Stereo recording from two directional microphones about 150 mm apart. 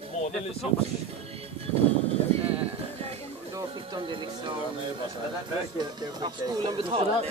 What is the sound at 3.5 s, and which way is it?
Speech, 30° right (ahead or behind).